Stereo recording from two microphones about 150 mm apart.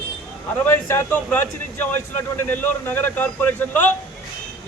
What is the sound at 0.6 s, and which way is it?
Speech, 15° left (ahead or behind).